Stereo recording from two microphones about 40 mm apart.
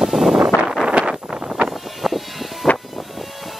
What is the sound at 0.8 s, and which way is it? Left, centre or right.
Vehicle, right.